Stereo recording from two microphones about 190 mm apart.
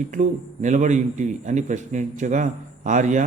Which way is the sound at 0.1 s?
40° right (ahead or behind).